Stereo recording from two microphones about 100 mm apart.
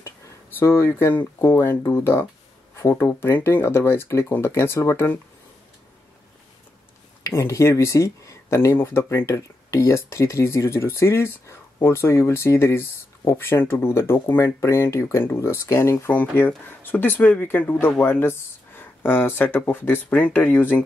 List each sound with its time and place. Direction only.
0.6 s speech: 25° left (ahead or behind)
7.2 s speech: 30° left (ahead or behind)
16.1 s speech: 15° left (ahead or behind)